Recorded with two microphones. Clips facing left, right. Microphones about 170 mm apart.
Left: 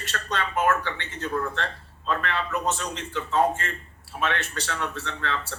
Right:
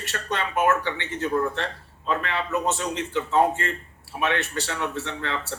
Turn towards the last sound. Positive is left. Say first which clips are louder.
# right 1 dB
turn(degrees=-15)  # may be behind; listen again after turning